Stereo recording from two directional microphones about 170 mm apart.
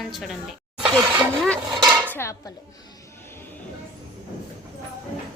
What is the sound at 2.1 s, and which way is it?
Child singing, 15° left (ahead or behind).